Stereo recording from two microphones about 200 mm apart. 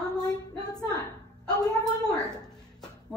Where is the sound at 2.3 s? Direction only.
5° left (ahead or behind).